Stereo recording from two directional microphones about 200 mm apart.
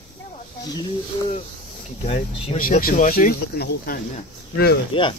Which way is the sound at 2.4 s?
40° left (ahead or behind).